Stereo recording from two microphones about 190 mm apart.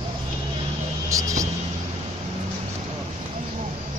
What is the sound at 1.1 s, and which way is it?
Vehicle, 15° right (ahead or behind).